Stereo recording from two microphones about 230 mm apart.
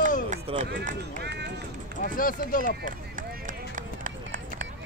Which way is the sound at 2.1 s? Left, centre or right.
Left.